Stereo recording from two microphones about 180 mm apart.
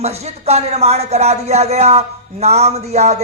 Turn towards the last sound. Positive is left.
turn(degrees=-40)  # may be behind; listen again after turning